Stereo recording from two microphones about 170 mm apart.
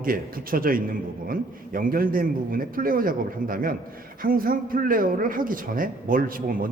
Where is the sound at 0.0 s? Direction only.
55° right (ahead or behind).